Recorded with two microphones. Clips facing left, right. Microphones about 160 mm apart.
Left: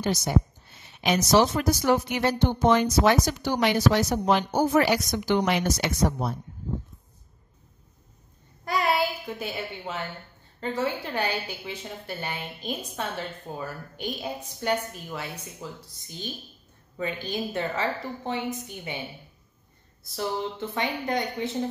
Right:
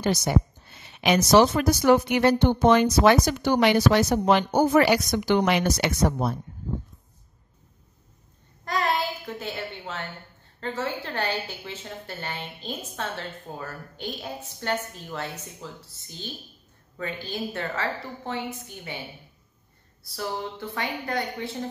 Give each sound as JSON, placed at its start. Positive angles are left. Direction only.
{"t": 0.0, "sound": "a woman's voice", "side_deg": -65}
{"t": 8.6, "sound": "a sound", "side_deg": 10}
{"t": 10.6, "sound": "a woman's voice", "side_deg": 15}
{"t": 16.9, "sound": "a woman's voice", "side_deg": 15}
{"t": 20.0, "sound": "speech", "side_deg": 20}